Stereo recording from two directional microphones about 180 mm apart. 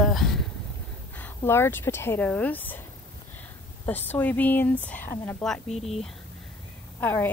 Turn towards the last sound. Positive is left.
turn(degrees=10)  # may be behind; listen again after turning